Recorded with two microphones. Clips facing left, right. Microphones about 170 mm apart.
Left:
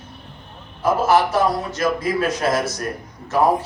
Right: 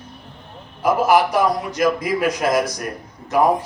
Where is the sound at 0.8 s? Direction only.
15° right (ahead or behind).